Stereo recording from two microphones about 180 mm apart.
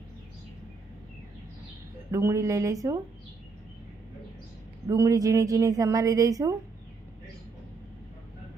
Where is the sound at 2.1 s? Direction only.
15° right (ahead or behind).